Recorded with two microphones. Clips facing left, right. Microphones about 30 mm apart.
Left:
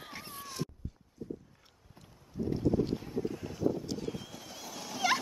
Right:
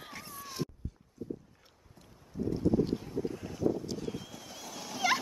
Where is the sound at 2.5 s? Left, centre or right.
Centre.